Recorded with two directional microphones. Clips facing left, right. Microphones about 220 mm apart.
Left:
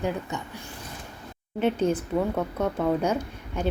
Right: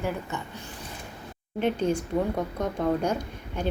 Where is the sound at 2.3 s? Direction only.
10° right (ahead or behind).